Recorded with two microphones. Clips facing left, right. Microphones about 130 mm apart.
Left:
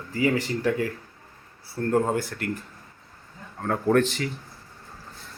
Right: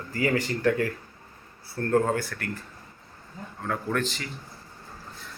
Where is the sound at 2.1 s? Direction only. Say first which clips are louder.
Left 3 dB; 20° left (ahead or behind).